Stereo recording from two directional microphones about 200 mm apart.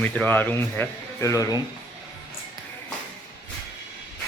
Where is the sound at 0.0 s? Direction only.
5° left (ahead or behind).